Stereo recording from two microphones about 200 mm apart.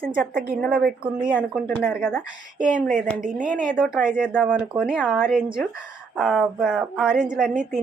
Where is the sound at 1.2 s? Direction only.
5° right (ahead or behind).